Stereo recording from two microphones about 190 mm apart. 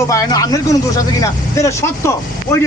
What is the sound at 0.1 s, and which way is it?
Speech, 20° left (ahead or behind).